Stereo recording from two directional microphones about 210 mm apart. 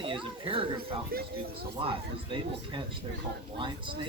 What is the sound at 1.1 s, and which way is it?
Speech, 45° right (ahead or behind).